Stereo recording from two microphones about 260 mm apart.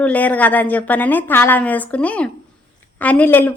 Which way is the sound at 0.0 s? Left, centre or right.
Centre.